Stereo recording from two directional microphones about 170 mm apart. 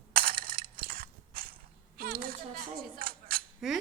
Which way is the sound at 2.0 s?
60° right (ahead or behind).